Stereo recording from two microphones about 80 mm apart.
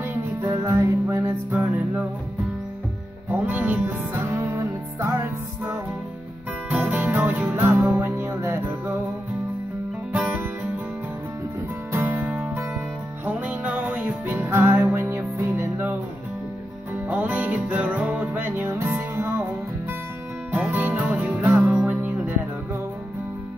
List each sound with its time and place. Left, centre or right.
0.0 s music: right
0.7 s music: right
1.2 s music: right
3.3 s music: right
6.7 s music: centre; by 8.7 s right
10.2 s music: centre
11.9 s music: right
17.1 s music: centre
20.5 s music: centre